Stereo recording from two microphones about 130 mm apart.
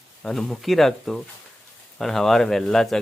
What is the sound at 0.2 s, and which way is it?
Speech, 5° left (ahead or behind).